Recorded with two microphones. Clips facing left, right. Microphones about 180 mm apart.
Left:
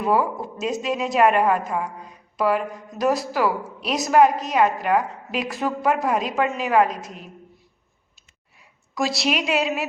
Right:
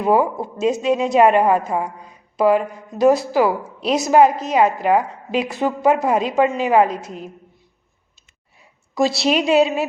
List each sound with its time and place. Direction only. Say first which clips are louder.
0.0 s a woman's voice: right 4 dB; 25° right (ahead or behind)
9.0 s a woman's voice: right 6 dB; 25° right (ahead or behind)